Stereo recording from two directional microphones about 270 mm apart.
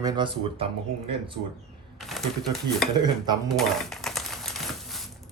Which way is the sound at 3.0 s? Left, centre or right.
Centre.